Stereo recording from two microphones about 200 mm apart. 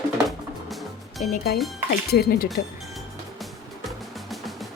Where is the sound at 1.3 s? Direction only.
55° left (ahead or behind).